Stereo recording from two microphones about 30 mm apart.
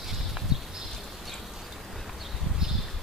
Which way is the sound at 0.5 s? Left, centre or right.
Centre.